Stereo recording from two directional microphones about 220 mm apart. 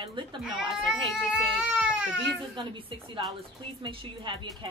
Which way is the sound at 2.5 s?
20° right (ahead or behind).